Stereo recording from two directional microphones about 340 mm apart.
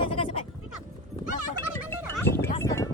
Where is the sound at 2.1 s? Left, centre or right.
Centre.